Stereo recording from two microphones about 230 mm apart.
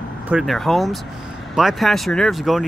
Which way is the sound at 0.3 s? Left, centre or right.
Centre.